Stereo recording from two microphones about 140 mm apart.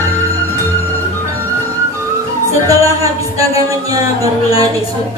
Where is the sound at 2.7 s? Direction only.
20° right (ahead or behind).